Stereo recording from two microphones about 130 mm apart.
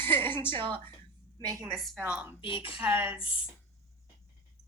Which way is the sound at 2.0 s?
15° right (ahead or behind).